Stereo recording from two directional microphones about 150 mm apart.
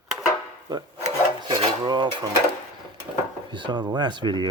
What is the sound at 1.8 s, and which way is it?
Speech, 30° right (ahead or behind).